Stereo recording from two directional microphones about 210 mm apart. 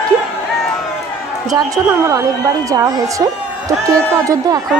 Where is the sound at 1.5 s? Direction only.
15° right (ahead or behind).